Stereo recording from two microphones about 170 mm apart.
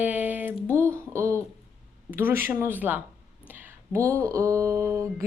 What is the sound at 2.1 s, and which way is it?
Speech, 15° right (ahead or behind).